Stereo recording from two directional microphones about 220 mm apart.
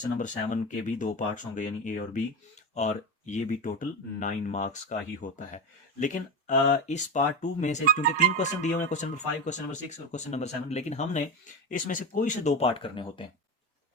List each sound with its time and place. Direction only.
0.2 s speech: 35° left (ahead or behind)